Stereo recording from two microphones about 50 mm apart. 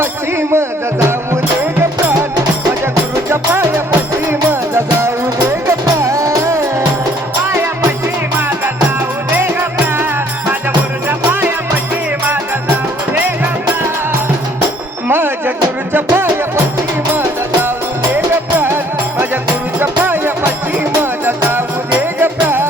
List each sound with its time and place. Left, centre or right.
0.0 s music: right
3.2 s music: right
4.3 s music: right
6.0 s music: right
9.3 s music: right
15.0 s music: right
18.5 s music: right
19.8 s music: right